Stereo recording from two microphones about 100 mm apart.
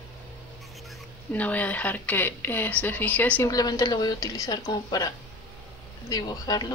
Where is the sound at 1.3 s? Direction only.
15° left (ahead or behind).